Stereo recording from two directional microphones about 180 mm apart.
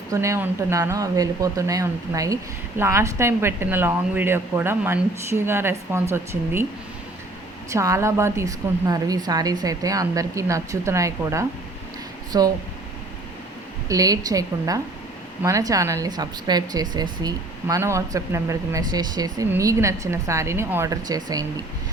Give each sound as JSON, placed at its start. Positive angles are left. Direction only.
{"t": 0.1, "sound": "speech", "side_deg": -15}
{"t": 7.7, "sound": "a woman's voice", "side_deg": -15}
{"t": 13.8, "sound": "a woman's voice", "side_deg": -20}